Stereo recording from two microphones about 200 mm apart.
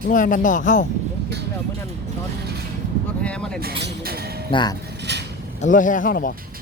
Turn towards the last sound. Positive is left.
turn(degrees=45)  # may be behind; listen again after turning